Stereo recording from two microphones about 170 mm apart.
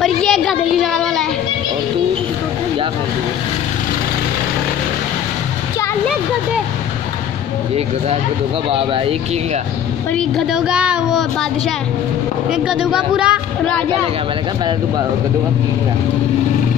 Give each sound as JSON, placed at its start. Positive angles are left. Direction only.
{"t": 0.0, "sound": "a sound", "side_deg": 0}
{"t": 8.6, "sound": "speech", "side_deg": -35}
{"t": 10.1, "sound": "speech", "side_deg": 0}
{"t": 12.4, "sound": "speech", "side_deg": -5}